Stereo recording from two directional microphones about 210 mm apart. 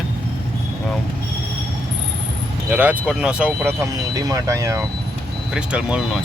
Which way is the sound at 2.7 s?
5° right (ahead or behind).